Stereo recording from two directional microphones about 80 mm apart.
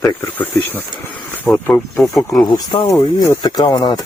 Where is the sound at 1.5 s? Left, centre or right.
Left.